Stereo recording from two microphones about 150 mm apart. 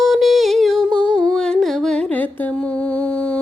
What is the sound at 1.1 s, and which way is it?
Music, 5° left (ahead or behind).